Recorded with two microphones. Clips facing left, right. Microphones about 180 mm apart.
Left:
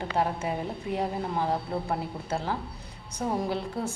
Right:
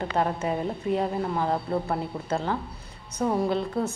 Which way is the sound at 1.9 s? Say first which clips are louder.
Right 3 dB; 10° left (ahead or behind).